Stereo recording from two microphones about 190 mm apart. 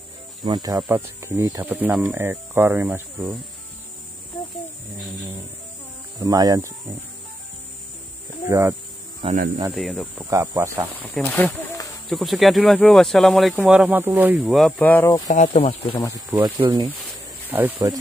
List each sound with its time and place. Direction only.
0.4 s speech: 20° right (ahead or behind)
6.1 s speech: 20° right (ahead or behind)
8.5 s speech: 15° right (ahead or behind)
9.2 s cricket: 30° right (ahead or behind)
9.8 s speech: centre (ahead or behind)
10.3 s speech: 15° right (ahead or behind)
11.1 s speech: 5° left (ahead or behind)
15.2 s speech: 40° left (ahead or behind)
15.9 s speech: 15° left (ahead or behind)
16.4 s speech: 25° right (ahead or behind)
17.5 s speech: 10° right (ahead or behind)